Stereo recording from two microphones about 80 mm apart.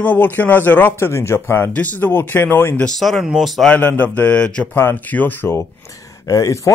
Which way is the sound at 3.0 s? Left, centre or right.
Centre.